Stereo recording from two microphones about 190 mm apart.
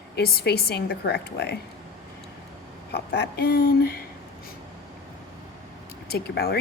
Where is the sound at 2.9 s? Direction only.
60° left (ahead or behind).